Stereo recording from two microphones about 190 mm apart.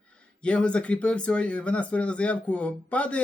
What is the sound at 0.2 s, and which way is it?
Speech, 5° left (ahead or behind).